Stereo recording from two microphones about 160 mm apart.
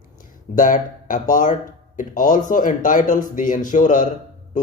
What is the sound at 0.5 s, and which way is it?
Speech, 55° left (ahead or behind).